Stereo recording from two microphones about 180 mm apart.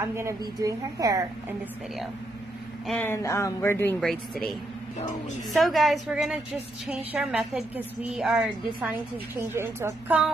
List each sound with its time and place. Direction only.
0.0 s a woman's voice: 15° right (ahead or behind)
2.9 s speech: 10° left (ahead or behind)
4.0 s a woman's voice: centre (ahead or behind)
9.5 s a woman's voice: 15° right (ahead or behind)